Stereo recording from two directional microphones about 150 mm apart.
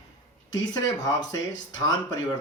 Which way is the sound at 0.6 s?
25° left (ahead or behind).